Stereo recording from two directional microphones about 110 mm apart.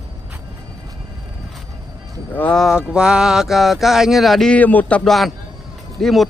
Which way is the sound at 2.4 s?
10° left (ahead or behind).